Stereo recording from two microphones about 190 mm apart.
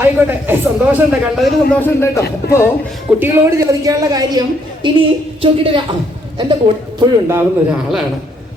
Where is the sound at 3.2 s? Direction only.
15° right (ahead or behind).